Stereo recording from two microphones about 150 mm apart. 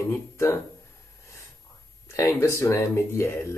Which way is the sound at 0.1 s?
15° left (ahead or behind).